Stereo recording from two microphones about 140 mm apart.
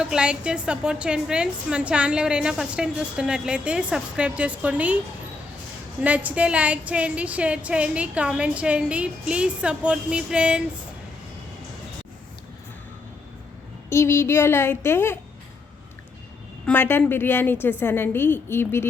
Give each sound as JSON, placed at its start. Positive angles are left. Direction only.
{"t": 0.0, "sound": "a woman's voice", "side_deg": -5}
{"t": 6.0, "sound": "a woman's voice", "side_deg": -10}
{"t": 13.9, "sound": "a woman's voice", "side_deg": 20}
{"t": 16.6, "sound": "a woman's voice", "side_deg": 15}